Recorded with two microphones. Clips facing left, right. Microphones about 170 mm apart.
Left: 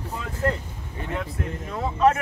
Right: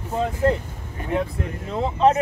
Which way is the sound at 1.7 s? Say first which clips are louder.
Right 2 dB; 25° right (ahead or behind).